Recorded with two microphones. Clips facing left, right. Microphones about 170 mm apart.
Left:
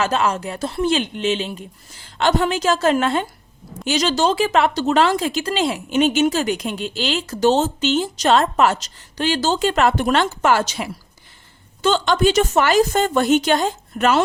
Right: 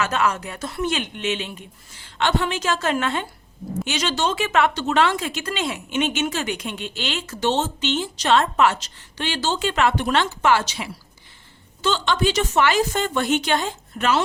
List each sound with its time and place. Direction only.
0.0 s a woman's voice: 30° left (ahead or behind)